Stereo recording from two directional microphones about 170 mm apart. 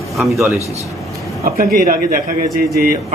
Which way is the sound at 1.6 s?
55° right (ahead or behind).